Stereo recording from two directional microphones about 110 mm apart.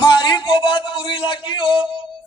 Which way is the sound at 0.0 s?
40° left (ahead or behind).